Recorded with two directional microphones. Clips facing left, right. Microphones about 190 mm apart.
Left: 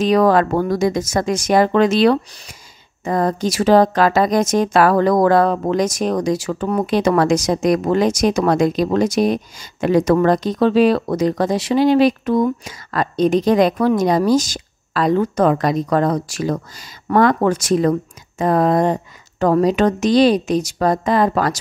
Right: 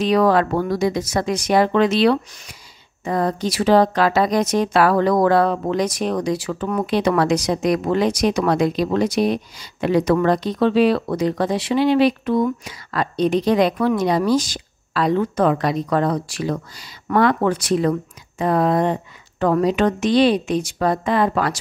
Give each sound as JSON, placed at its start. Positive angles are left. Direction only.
{"t": 0.0, "sound": "a woman's voice", "side_deg": 45}